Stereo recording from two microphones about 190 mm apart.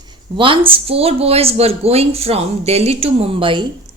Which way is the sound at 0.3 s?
25° right (ahead or behind).